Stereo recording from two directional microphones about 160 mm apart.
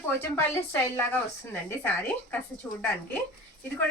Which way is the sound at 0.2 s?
15° left (ahead or behind).